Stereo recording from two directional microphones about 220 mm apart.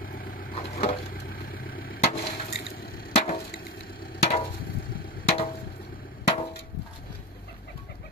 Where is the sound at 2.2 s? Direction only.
30° left (ahead or behind).